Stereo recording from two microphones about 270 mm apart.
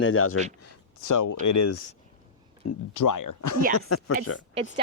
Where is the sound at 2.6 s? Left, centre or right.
Left.